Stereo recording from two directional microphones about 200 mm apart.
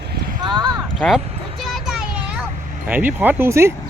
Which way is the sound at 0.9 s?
Centre (ahead or behind).